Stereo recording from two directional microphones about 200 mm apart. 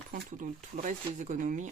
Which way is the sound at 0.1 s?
40° right (ahead or behind).